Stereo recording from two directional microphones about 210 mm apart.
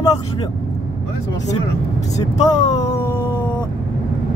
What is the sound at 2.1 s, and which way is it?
Speech, 20° left (ahead or behind).